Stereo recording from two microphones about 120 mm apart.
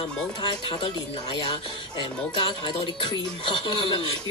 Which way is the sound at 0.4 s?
45° left (ahead or behind).